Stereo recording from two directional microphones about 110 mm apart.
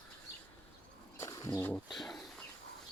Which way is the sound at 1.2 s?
30° left (ahead or behind).